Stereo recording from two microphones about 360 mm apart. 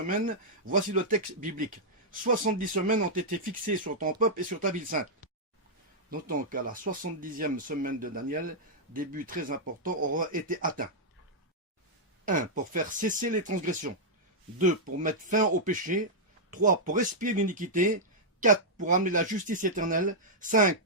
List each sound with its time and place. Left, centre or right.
0.7 s speech: right
6.1 s speech: right
12.2 s speech: right
14.9 s speech: right